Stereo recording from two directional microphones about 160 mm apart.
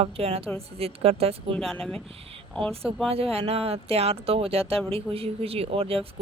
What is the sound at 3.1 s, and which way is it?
Speech, 40° right (ahead or behind).